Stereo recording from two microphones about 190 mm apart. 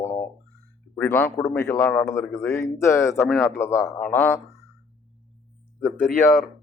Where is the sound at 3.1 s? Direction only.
5° left (ahead or behind).